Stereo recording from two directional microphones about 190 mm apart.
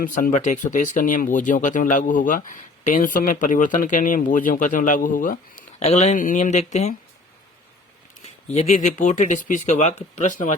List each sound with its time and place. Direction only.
0.0 s a man's voice: 45° left (ahead or behind)
8.5 s speech: 40° left (ahead or behind)